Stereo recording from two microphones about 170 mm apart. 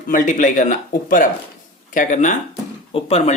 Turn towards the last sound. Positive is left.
turn(degrees=35)  # may be behind; listen again after turning